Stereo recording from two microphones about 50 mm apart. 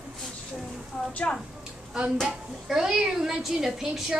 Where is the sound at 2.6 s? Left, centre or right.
Centre.